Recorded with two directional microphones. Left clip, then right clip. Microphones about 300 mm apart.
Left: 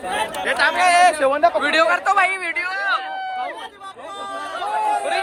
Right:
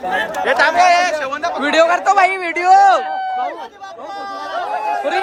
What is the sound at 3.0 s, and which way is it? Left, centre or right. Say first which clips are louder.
Run: right 6 dB; right.